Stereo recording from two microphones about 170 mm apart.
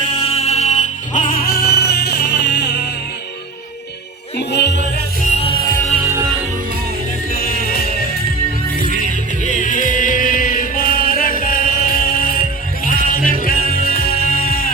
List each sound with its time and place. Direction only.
0.0 s music: 35° left (ahead or behind); by 2.9 s 80° left
4.4 s music: 80° left
5.2 s music: 45° left (ahead or behind)
5.5 s music: 25° left (ahead or behind)
6.1 s music: 15° right (ahead or behind)
7.6 s music: 65° left (ahead or behind)
9.4 s music: 50° left (ahead or behind)